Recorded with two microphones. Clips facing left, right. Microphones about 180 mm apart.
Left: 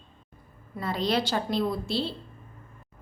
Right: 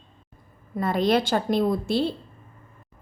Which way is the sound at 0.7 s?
50° right (ahead or behind).